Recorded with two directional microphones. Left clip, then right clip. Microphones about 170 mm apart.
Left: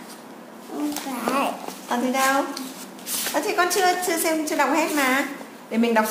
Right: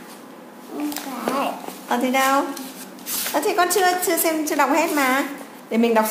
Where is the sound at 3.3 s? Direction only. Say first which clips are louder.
Right 3 dB; 30° right (ahead or behind).